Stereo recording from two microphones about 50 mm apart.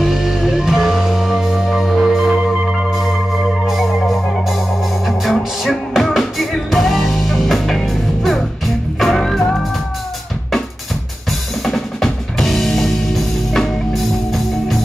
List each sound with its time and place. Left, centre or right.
0.0 s music: centre
2.3 s music: centre
11.6 s music: centre